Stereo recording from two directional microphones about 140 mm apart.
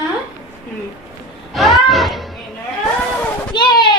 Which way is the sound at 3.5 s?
35° left (ahead or behind).